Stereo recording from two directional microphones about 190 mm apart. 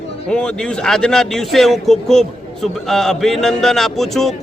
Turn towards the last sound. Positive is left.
turn(degrees=0)  # may be behind; listen again after turning